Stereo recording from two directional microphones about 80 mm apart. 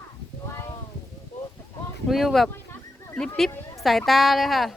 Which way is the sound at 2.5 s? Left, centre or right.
Left.